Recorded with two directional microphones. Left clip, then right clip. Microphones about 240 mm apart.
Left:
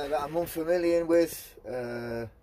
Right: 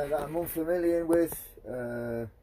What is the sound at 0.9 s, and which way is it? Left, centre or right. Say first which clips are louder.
Speech: left 2 dB; centre.